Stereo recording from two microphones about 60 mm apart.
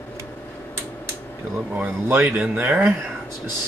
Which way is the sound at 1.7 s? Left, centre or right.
Right.